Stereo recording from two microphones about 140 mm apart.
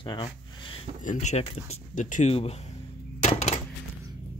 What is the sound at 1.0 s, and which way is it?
Speech, 60° left (ahead or behind).